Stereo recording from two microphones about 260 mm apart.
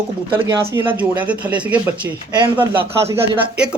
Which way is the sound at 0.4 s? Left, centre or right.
Centre.